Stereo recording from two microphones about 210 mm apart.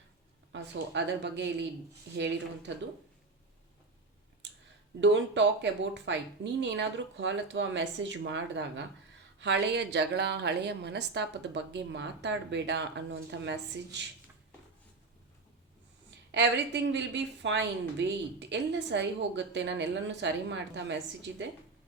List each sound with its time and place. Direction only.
0.5 s a woman's voice: 55° right (ahead or behind)
4.4 s clicking: 55° right (ahead or behind)
4.9 s a woman's voice: 60° right (ahead or behind)
16.0 s a woman's voice: 55° right (ahead or behind)